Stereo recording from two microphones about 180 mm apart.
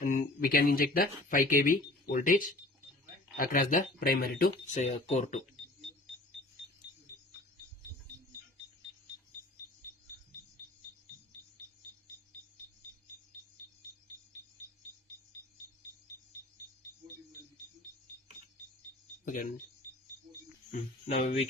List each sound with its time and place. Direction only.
0.0 s speech: 45° left (ahead or behind)
4.5 s speech: 35° left (ahead or behind)
19.2 s speech: 45° left (ahead or behind)
21.2 s speech: 35° left (ahead or behind)